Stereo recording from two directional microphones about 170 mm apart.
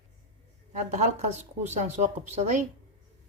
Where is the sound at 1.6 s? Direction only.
40° right (ahead or behind).